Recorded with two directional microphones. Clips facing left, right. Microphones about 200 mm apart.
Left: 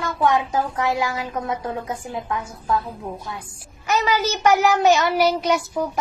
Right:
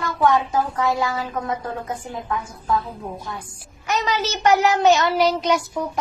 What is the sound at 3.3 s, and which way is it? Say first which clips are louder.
A woman's voice: right 1 dB; 10° left (ahead or behind).